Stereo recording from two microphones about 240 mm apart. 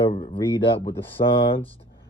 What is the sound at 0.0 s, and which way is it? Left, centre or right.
Speech, left.